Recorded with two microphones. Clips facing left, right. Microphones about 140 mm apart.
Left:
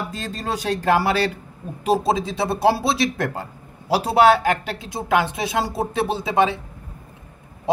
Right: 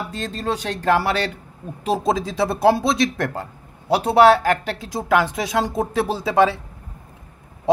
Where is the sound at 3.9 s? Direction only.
5° left (ahead or behind).